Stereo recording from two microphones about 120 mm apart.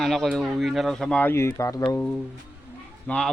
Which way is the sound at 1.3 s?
20° left (ahead or behind).